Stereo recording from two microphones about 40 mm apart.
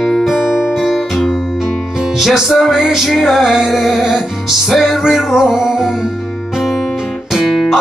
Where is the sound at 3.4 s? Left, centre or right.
Centre.